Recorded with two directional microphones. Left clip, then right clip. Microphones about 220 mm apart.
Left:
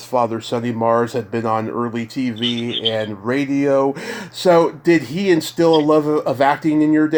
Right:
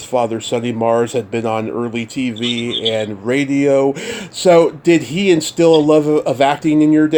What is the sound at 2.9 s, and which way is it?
Speech, 25° right (ahead or behind).